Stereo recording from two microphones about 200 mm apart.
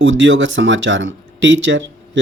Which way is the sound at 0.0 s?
65° right (ahead or behind).